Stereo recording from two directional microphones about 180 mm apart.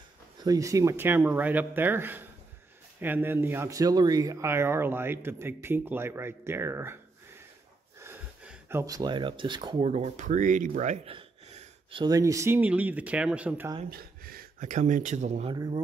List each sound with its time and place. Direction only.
0.4 s speech: 20° right (ahead or behind)
8.0 s speech: 15° right (ahead or behind); by 11.1 s 40° right (ahead or behind)
11.1 s gasp: 35° right (ahead or behind)
12.0 s speech: 20° right (ahead or behind)
13.8 s speech: 55° right (ahead or behind); by 15.5 s 40° right (ahead or behind)
15.5 s speech: 25° right (ahead or behind)